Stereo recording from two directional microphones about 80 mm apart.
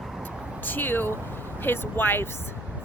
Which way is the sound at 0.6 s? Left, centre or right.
Left.